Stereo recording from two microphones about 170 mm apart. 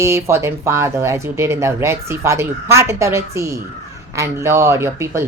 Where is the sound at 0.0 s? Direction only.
15° right (ahead or behind).